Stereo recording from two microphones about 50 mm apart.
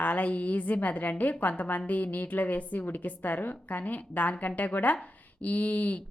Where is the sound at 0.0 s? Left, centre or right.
Left.